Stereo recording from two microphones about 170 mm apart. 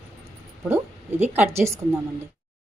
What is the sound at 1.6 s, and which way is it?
Speech, 15° right (ahead or behind).